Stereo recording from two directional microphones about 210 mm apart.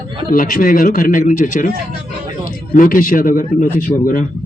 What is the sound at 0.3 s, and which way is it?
A man's voice, 40° left (ahead or behind).